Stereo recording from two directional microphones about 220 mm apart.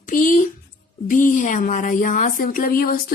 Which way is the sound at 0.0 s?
35° left (ahead or behind).